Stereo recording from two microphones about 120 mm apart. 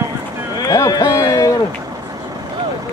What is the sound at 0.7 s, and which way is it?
Speech, 30° left (ahead or behind).